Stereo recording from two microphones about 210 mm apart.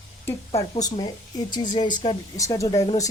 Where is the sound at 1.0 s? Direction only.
20° left (ahead or behind).